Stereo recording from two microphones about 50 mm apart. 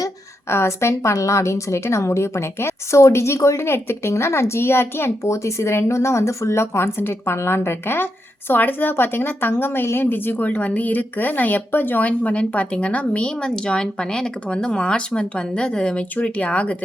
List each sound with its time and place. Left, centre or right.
0.4 s a woman's voice: left
3.7 s a child's voice: left
5.2 s a woman's voice: left